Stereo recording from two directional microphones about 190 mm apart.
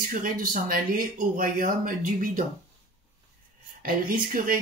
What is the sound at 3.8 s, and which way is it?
Speech, 50° right (ahead or behind).